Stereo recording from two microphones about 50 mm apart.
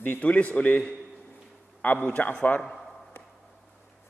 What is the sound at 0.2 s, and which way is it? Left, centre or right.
A man's voice, left.